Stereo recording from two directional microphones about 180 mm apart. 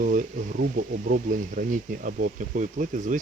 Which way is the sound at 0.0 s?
50° right (ahead or behind).